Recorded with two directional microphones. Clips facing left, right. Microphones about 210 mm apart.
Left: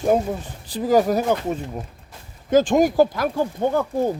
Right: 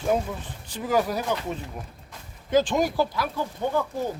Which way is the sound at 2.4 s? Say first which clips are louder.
Left 6 dB; 45° left (ahead or behind).